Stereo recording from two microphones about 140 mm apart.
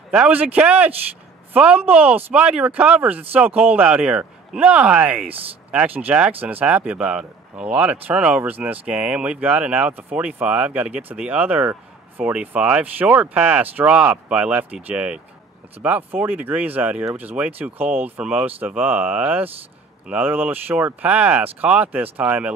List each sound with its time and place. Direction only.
0.1 s a woman's voice: 10° right (ahead or behind)